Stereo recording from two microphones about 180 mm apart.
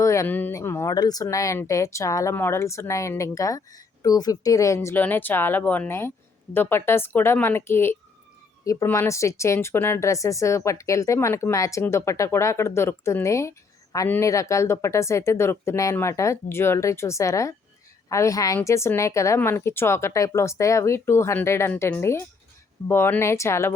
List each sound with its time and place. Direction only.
0.0 s speech: 15° left (ahead or behind)